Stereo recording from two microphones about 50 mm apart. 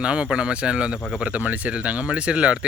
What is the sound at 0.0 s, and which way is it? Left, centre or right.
Speech, right.